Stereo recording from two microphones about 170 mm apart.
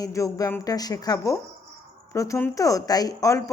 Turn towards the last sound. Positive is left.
turn(degrees=20)  # may be behind; listen again after turning